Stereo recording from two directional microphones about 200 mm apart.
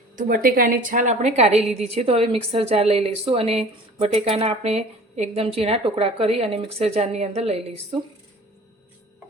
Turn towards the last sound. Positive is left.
turn(degrees=-30)  # may be behind; listen again after turning